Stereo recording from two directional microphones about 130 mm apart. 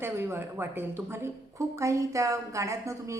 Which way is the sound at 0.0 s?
20° right (ahead or behind).